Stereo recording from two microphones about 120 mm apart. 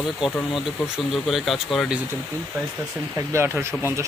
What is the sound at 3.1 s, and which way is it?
Speech, 20° right (ahead or behind).